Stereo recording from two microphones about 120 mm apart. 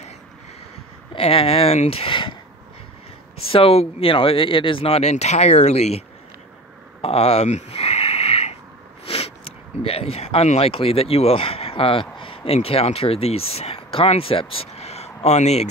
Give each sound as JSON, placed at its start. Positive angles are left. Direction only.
{"t": 1.1, "sound": "speech", "side_deg": 50}
{"t": 3.5, "sound": "speech", "side_deg": 55}
{"t": 7.0, "sound": "a sound", "side_deg": 55}
{"t": 9.0, "sound": "speech", "side_deg": 55}